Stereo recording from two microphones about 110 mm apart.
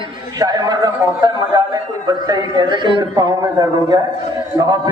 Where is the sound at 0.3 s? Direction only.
40° right (ahead or behind).